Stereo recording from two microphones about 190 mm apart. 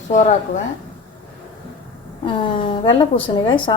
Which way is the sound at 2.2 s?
25° left (ahead or behind).